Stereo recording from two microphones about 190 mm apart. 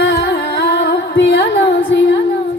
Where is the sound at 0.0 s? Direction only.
60° left (ahead or behind).